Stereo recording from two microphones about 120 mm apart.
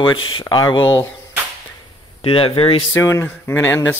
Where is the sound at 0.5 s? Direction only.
30° left (ahead or behind).